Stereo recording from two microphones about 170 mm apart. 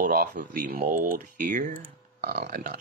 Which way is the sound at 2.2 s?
65° right (ahead or behind).